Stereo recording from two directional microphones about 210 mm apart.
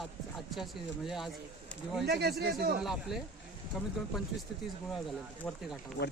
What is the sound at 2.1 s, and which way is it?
Speech, 50° right (ahead or behind).